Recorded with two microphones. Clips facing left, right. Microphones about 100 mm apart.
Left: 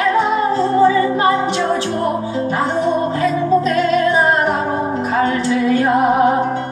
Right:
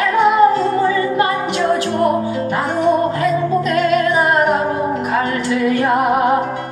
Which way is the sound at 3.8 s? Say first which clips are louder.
Even; 35° left (ahead or behind).